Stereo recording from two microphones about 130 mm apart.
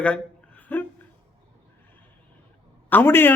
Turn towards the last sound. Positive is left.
turn(degrees=15)  # may be behind; listen again after turning